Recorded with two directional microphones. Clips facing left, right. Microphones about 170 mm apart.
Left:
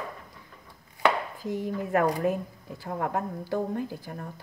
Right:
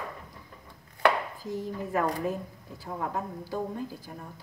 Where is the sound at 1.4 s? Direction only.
65° left (ahead or behind).